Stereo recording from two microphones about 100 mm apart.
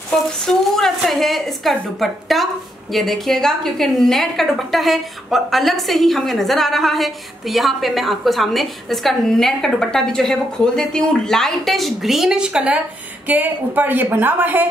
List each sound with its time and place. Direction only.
0.5 s a woman's voice: 5° left (ahead or behind); by 14.7 s 20° right (ahead or behind)